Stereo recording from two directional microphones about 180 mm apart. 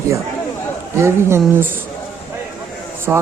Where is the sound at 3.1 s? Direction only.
5° right (ahead or behind).